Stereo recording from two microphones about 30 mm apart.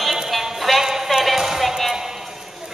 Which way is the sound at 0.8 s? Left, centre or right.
Centre.